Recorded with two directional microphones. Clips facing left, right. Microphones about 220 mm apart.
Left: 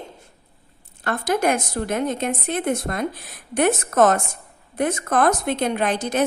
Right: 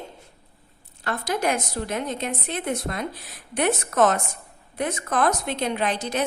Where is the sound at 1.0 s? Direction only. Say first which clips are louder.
Left 4 dB; 50° left (ahead or behind).